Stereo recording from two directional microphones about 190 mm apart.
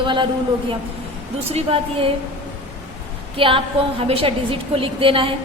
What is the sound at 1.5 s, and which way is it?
Speech, 30° right (ahead or behind).